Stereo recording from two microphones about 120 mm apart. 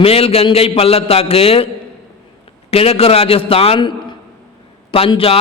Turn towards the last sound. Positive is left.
turn(degrees=50)  # may be behind; listen again after turning